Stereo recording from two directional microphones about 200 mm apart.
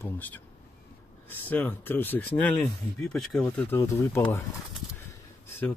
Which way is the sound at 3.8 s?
15° left (ahead or behind).